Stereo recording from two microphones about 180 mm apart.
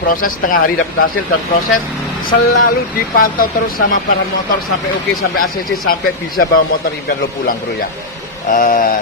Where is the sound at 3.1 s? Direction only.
55° left (ahead or behind).